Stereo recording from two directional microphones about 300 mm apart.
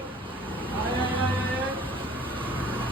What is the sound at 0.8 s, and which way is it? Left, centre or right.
Vehicle, centre.